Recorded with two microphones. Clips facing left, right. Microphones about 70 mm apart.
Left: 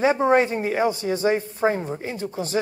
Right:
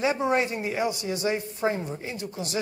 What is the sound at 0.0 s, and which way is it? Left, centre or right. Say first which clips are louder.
A man's voice: left 6 dB; left.